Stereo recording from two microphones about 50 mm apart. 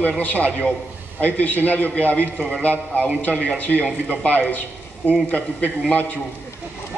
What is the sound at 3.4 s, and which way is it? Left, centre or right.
A man's voice, left.